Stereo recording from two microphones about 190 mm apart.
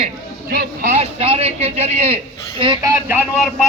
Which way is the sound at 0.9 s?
35° right (ahead or behind).